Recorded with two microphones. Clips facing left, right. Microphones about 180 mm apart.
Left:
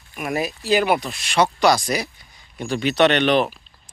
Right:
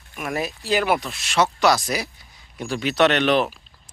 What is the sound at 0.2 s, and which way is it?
Speech, 5° left (ahead or behind).